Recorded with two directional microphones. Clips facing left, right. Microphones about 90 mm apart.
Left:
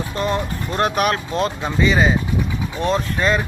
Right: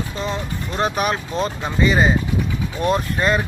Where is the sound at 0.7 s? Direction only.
Centre (ahead or behind).